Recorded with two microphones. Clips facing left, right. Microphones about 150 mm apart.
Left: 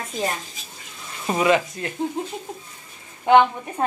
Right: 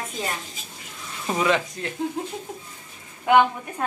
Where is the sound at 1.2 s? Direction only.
5° left (ahead or behind).